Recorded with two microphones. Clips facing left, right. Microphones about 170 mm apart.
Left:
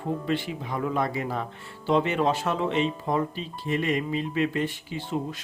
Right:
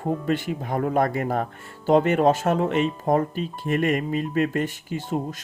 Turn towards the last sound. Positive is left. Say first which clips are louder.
# right 3 dB
turn(degrees=-45)  # may be behind; listen again after turning